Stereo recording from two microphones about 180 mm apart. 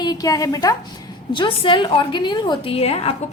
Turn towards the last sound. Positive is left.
turn(degrees=35)  # may be behind; listen again after turning